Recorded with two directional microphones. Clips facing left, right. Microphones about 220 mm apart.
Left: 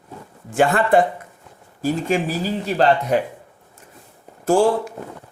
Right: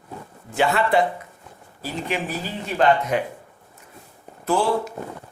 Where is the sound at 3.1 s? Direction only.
40° left (ahead or behind).